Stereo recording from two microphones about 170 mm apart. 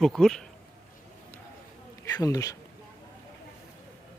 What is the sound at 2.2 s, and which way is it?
Speech, 20° left (ahead or behind).